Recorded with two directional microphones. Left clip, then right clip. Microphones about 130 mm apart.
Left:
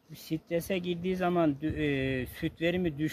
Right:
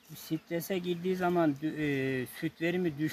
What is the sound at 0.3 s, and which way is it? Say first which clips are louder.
Speech: left 3 dB; 35° left (ahead or behind).